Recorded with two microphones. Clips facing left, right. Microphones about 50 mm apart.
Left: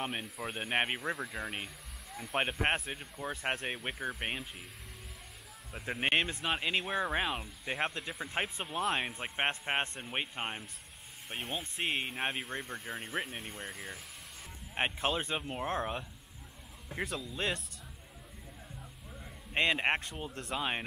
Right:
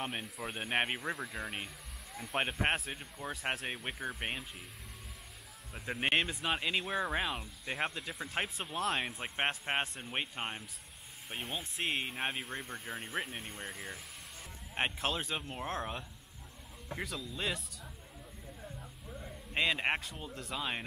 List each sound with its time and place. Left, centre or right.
0.0 s speech: centre
5.7 s speech: centre
18.8 s music: centre
19.5 s speech: centre